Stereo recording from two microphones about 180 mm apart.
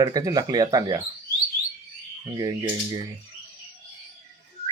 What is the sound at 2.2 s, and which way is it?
Speech, 25° right (ahead or behind).